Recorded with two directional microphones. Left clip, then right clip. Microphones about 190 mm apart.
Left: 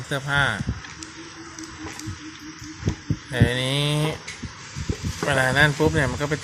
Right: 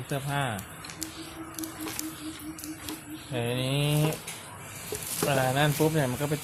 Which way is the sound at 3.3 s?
15° left (ahead or behind).